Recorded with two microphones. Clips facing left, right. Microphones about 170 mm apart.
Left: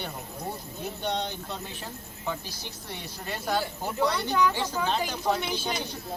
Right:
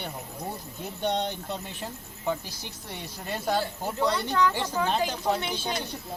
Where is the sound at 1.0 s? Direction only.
20° right (ahead or behind).